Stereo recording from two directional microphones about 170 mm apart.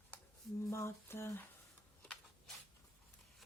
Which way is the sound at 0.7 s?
15° left (ahead or behind).